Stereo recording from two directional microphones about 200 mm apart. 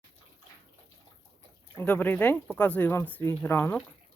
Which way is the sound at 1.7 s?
5° left (ahead or behind).